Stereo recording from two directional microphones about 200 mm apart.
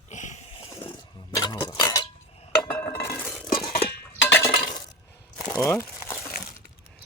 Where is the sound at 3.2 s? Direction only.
Centre (ahead or behind).